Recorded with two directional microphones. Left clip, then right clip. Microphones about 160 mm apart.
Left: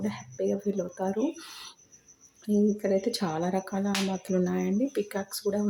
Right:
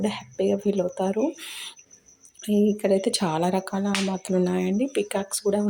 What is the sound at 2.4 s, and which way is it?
Speech, 15° right (ahead or behind).